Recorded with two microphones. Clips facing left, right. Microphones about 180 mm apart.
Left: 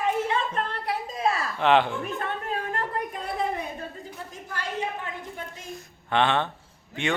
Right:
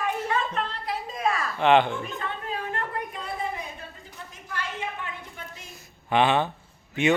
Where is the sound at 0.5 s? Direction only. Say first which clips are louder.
Left 1 dB; 60° left (ahead or behind).